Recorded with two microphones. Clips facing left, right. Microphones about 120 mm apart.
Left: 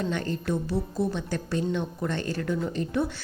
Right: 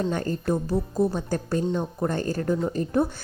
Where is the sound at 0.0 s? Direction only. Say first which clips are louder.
Right 3 dB; 40° right (ahead or behind).